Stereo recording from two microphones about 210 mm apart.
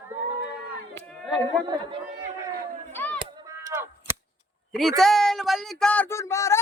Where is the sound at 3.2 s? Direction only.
20° right (ahead or behind).